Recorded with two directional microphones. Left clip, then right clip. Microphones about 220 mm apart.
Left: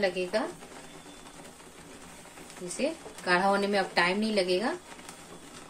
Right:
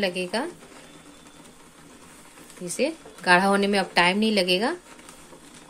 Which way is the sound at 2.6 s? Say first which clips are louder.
Right 5 dB; 40° right (ahead or behind).